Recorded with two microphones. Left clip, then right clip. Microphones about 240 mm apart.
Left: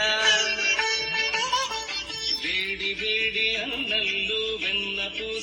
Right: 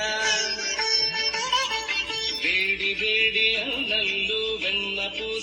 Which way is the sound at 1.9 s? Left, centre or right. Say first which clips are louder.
Right 3 dB; centre.